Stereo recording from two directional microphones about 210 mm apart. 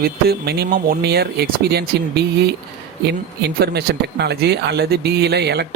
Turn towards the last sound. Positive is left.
turn(degrees=-50)  # may be behind; listen again after turning